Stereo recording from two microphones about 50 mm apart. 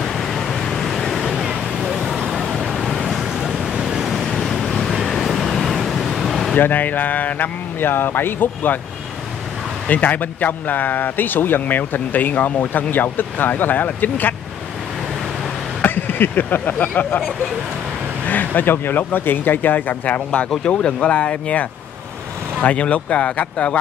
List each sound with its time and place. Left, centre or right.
0.0 s vehicle: centre
1.5 s a sound: centre
2.0 s vehicle: centre
4.2 s vehicle: centre
4.9 s a sound: centre
6.6 s speech: left
9.8 s speech: left
15.8 s speech: left
18.2 s speech: left
20.2 s speech: left